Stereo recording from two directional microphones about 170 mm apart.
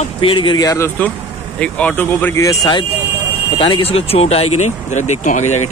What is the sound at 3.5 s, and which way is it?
Speech, 30° left (ahead or behind).